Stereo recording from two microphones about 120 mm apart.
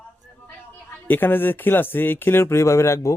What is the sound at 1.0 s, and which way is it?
Speech, 15° left (ahead or behind).